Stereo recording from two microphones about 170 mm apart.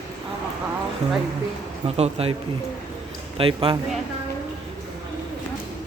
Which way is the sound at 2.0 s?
35° right (ahead or behind).